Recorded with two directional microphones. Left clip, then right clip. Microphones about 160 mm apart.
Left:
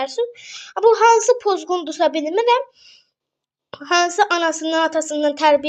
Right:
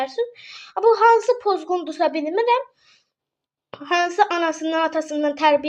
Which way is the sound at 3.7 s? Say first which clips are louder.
Left 3 dB; 25° left (ahead or behind).